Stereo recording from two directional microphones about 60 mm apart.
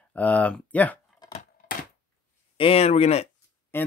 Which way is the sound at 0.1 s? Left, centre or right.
Left.